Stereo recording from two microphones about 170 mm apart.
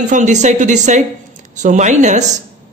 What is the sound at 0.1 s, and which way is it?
Speech, 45° right (ahead or behind).